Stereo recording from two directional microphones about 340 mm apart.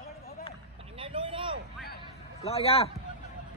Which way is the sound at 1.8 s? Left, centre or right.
Left.